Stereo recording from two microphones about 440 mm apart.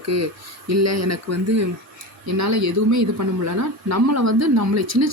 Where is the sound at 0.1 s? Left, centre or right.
Right.